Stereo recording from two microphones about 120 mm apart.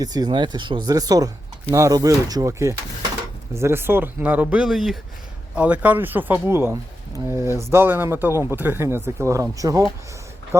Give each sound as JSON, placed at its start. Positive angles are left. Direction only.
{"t": 0.0, "sound": "speech", "side_deg": -35}